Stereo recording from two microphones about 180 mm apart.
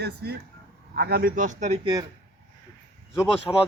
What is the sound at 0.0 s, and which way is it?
Speech, 60° right (ahead or behind).